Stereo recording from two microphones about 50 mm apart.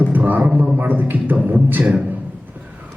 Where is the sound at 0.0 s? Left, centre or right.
Right.